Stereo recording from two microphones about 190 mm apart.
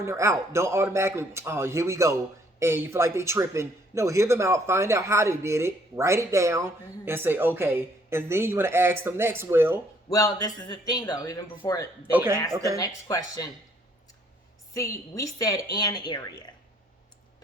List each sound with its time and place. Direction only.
0.0 s a man's voice: 15° right (ahead or behind)
10.1 s speech: 20° left (ahead or behind)
12.1 s a man's voice: 10° right (ahead or behind)
12.8 s speech: 20° left (ahead or behind)
14.7 s a woman's voice: 15° left (ahead or behind)